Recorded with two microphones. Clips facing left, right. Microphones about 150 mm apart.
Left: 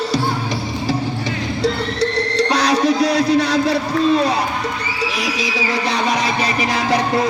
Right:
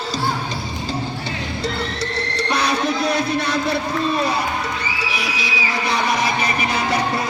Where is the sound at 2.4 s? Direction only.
80° left.